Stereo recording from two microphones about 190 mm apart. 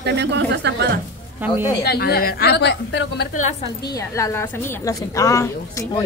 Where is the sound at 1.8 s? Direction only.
55° left (ahead or behind).